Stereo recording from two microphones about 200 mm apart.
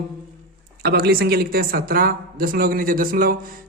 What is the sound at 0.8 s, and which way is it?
A man's voice, 50° right (ahead or behind).